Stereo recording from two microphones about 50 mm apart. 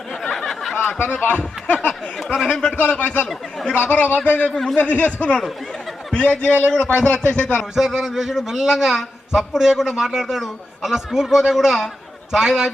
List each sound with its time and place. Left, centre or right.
0.2 s a sound: centre
1.1 s speech: left
1.9 s speech: centre
2.5 s a man's voice: centre
4.8 s a man's voice: left
7.8 s a man's voice: centre